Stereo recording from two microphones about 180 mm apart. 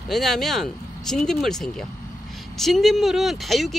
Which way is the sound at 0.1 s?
Centre (ahead or behind).